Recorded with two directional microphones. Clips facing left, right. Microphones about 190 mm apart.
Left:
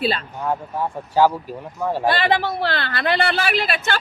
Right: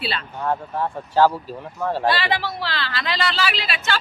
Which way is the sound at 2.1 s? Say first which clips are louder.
Left 4 dB; 50° left (ahead or behind).